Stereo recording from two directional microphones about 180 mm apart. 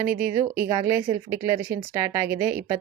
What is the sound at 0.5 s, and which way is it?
Speech, 15° right (ahead or behind).